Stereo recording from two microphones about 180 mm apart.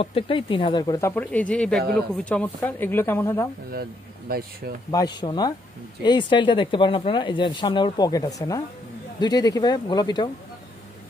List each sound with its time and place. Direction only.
0.0 s speech: 30° left (ahead or behind); by 3.4 s 15° left (ahead or behind)
4.3 s speech: 55° right (ahead or behind)
4.9 s speech: 25° left (ahead or behind)